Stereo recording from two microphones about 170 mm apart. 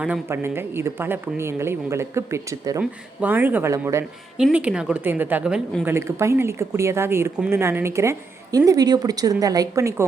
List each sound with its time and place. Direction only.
0.0 s speech: 10° right (ahead or behind)
4.4 s speech: 5° right (ahead or behind)
5.9 s speech: 15° right (ahead or behind)